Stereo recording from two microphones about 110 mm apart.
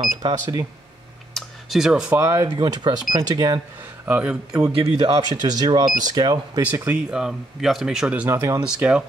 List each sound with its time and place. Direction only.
0.2 s speech: 35° right (ahead or behind)
1.3 s a sound: 5° right (ahead or behind)
2.1 s speech: 25° right (ahead or behind)
2.5 s speech: 45° right (ahead or behind)
4.0 s speech: 15° right (ahead or behind)
4.7 s speech: 60° right (ahead or behind)
5.3 s speech: 35° right (ahead or behind)
7.1 s speech: 5° right (ahead or behind)
8.3 s speech: 25° right (ahead or behind)
8.6 s speech: 10° right (ahead or behind)